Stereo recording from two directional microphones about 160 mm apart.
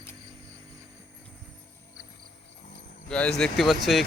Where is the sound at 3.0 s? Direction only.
5° left (ahead or behind).